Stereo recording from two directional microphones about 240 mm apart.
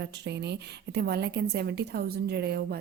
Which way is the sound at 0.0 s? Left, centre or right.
Right.